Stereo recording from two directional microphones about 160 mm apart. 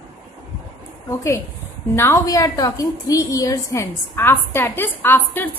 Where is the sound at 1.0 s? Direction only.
20° left (ahead or behind).